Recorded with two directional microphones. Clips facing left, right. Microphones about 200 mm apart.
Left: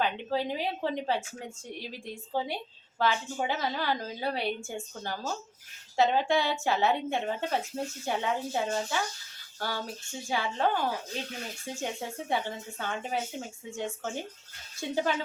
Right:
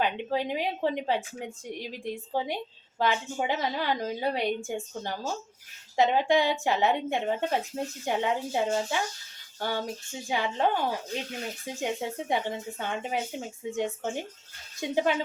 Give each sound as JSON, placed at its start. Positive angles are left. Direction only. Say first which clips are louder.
{"t": 0.0, "sound": "a woman's voice", "louder": "right 1 dB", "side_deg": -15}